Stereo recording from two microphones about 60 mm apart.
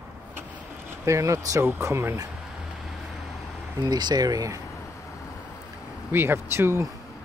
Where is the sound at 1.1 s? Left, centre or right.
Right.